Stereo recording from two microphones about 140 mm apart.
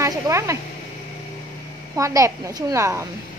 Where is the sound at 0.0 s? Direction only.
20° right (ahead or behind).